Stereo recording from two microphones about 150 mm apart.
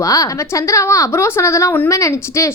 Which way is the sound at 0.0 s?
20° left (ahead or behind).